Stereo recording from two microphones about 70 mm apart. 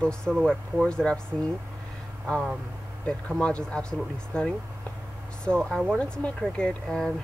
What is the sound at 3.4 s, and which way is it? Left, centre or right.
Speech, centre.